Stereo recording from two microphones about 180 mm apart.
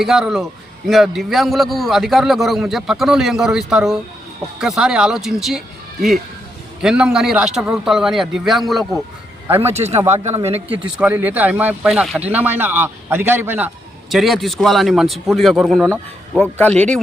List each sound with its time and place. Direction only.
0.0 s a man's voice: centre (ahead or behind)
9.5 s speech: 10° right (ahead or behind)
9.7 s speech: 35° right (ahead or behind)
10.7 s speech: 5° right (ahead or behind)
14.1 s a man's voice: centre (ahead or behind)